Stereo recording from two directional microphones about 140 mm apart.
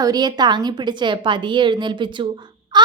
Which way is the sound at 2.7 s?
30° right (ahead or behind).